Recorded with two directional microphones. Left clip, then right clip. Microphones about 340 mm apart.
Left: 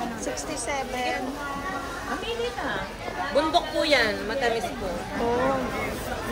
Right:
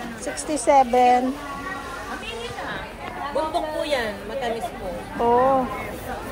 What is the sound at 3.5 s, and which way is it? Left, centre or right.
A woman's voice, left.